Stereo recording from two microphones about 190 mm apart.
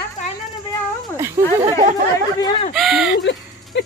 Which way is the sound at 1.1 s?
15° right (ahead or behind).